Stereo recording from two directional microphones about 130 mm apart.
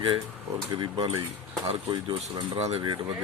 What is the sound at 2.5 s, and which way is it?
Speech, 50° right (ahead or behind).